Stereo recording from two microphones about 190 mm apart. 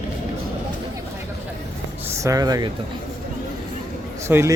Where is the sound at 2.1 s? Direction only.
15° right (ahead or behind).